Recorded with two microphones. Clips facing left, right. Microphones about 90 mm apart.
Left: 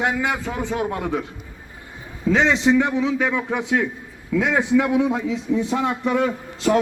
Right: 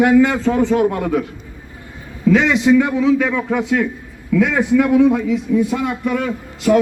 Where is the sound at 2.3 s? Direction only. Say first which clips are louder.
Right 4 dB; 25° left (ahead or behind).